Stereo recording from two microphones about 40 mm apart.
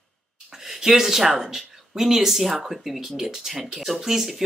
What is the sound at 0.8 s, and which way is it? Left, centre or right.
Speech, centre.